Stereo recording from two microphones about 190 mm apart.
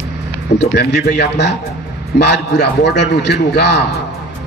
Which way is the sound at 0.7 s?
60° left (ahead or behind).